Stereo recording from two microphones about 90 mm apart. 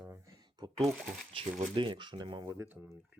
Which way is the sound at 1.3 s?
75° right (ahead or behind).